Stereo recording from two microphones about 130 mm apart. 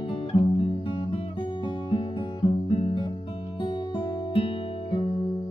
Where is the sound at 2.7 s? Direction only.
60° left (ahead or behind).